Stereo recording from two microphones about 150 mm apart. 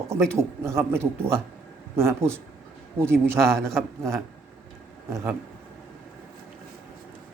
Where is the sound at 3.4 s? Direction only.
5° left (ahead or behind).